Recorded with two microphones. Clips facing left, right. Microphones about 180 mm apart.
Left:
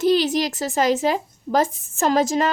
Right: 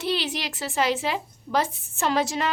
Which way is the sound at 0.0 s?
45° left (ahead or behind).